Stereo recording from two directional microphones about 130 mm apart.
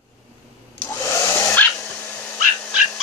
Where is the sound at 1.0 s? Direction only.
20° left (ahead or behind).